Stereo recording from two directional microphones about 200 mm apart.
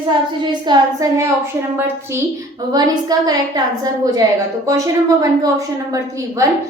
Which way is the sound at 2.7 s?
20° right (ahead or behind).